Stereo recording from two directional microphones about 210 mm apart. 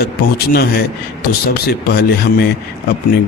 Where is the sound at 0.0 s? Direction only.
45° left (ahead or behind).